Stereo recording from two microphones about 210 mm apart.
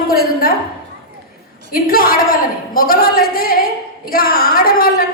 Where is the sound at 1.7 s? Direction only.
45° left (ahead or behind).